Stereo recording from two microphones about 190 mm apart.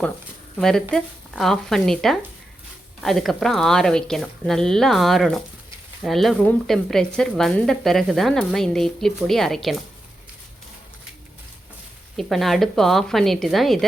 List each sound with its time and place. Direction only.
0.6 s speech: 5° left (ahead or behind)
12.1 s speech: centre (ahead or behind)